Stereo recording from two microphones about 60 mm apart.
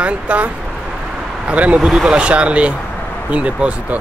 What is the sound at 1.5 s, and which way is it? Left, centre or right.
Speech, right.